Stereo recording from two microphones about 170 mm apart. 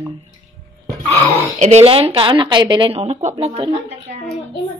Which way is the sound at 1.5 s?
40° right (ahead or behind).